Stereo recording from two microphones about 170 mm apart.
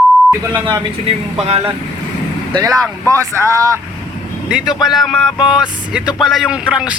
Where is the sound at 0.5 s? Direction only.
30° right (ahead or behind).